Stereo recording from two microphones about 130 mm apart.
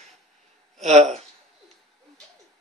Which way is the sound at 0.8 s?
60° right (ahead or behind).